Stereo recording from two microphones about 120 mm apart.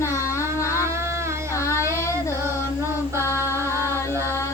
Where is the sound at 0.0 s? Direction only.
25° left (ahead or behind).